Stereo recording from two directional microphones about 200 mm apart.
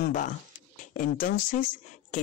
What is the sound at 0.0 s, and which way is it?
Speech, 40° left (ahead or behind).